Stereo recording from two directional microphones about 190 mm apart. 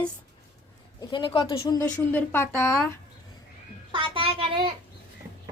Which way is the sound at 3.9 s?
25° right (ahead or behind).